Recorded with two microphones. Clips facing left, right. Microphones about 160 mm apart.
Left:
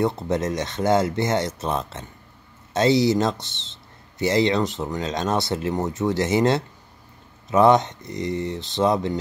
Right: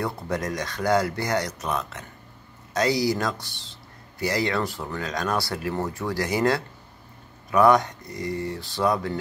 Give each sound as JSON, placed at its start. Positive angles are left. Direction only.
{"t": 0.0, "sound": "speech", "side_deg": 25}